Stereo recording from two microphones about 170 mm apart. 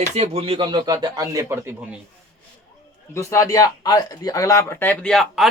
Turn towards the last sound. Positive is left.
turn(degrees=0)  # may be behind; listen again after turning